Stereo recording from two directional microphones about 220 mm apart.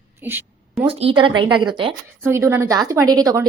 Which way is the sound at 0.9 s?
25° right (ahead or behind).